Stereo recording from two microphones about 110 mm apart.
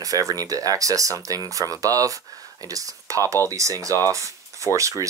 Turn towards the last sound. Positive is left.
turn(degrees=-30)  # may be behind; listen again after turning